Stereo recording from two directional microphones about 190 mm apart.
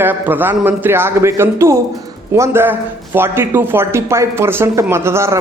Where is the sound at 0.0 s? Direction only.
10° right (ahead or behind).